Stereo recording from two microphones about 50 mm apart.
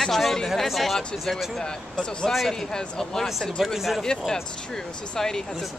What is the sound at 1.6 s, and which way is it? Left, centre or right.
Speech, centre.